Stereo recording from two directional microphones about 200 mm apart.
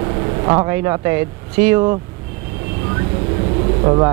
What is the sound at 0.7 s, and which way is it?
Speech, 15° right (ahead or behind).